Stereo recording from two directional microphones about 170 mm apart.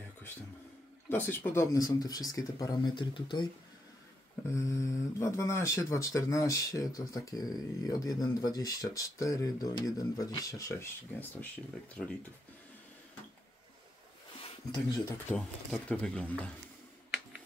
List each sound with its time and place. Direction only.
1.0 s speech: 10° left (ahead or behind); by 3.4 s 30° left (ahead or behind)
4.6 s speech: 15° left (ahead or behind)
14.7 s speech: 25° left (ahead or behind)
15.2 s speech: 5° left (ahead or behind)